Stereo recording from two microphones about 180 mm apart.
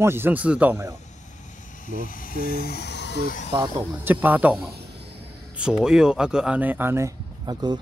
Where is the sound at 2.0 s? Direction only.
50° left (ahead or behind); by 3.1 s 70° left (ahead or behind).